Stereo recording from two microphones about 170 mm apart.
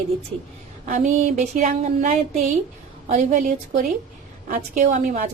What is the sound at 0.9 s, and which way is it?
A woman's voice, 45° right (ahead or behind).